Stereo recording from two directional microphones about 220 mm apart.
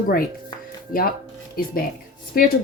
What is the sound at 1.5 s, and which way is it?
Speech, 40° left (ahead or behind).